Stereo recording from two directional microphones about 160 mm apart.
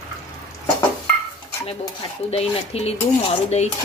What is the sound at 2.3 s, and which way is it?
Speech, 40° left (ahead or behind).